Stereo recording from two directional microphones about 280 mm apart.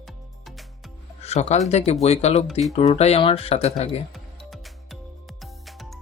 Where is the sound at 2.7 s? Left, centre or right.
Left.